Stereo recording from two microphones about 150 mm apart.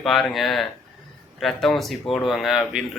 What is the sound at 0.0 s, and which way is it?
Speech, centre (ahead or behind).